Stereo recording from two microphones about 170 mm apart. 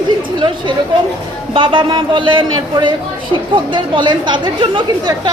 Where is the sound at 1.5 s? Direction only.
30° right (ahead or behind).